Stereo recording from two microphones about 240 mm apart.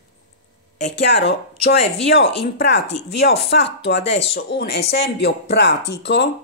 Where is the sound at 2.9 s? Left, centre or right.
Left.